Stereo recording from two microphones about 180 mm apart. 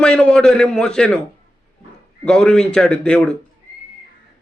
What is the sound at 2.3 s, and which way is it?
A man's voice, 5° left (ahead or behind).